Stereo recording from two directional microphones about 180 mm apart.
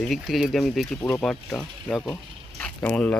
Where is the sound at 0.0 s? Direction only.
Centre (ahead or behind).